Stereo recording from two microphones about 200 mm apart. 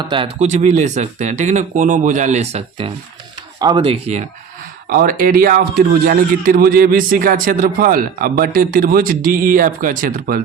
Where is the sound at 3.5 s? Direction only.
20° right (ahead or behind).